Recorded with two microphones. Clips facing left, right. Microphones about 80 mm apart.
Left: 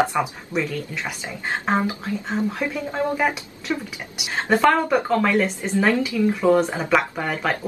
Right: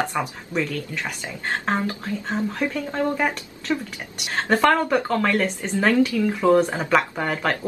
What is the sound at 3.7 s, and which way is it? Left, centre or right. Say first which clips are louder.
Speech: right 1 dB; centre.